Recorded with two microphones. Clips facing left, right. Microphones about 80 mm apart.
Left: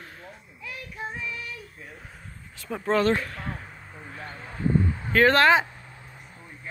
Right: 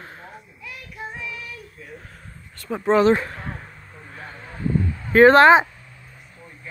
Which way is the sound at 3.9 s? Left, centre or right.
Centre.